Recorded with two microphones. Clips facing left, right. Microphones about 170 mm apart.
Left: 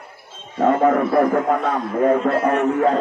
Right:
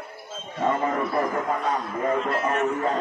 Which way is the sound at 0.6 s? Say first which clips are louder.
Left 8 dB; 55° left (ahead or behind).